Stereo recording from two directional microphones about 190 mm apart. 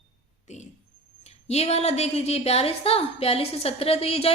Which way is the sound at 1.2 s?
35° left (ahead or behind).